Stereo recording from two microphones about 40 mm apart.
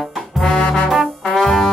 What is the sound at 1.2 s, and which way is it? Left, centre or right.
Brass instrument, centre.